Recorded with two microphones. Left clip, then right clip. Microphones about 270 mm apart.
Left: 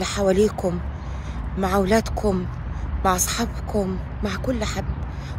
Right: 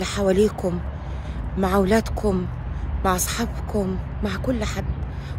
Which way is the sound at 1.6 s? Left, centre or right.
Centre.